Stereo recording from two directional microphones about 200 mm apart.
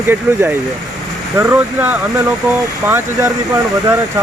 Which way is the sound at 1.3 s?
15° right (ahead or behind).